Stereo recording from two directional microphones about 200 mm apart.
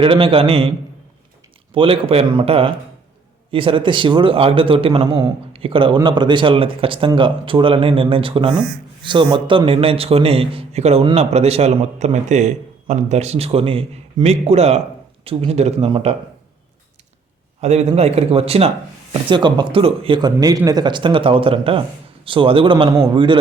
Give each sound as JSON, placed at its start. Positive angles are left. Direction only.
{"t": 0.0, "sound": "a man's voice", "side_deg": -25}
{"t": 1.7, "sound": "a man's voice", "side_deg": -25}
{"t": 17.6, "sound": "a man's voice", "side_deg": -35}